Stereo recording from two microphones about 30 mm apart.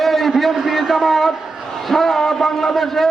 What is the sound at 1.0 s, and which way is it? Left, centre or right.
A man's voice, centre.